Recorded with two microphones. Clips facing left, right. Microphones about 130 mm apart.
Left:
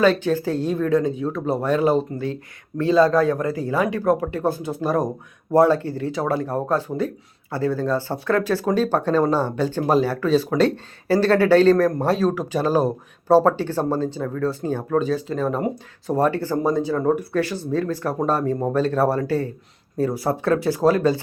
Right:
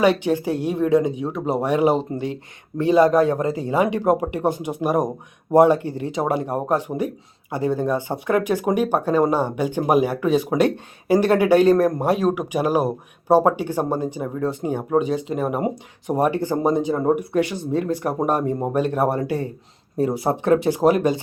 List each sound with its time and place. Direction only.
0.0 s speech: 15° right (ahead or behind)